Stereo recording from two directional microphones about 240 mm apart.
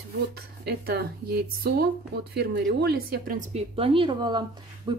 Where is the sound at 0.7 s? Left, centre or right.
Right.